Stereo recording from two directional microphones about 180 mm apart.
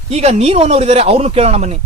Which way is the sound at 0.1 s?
35° right (ahead or behind).